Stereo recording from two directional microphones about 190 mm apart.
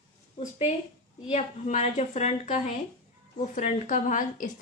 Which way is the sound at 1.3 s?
40° left (ahead or behind).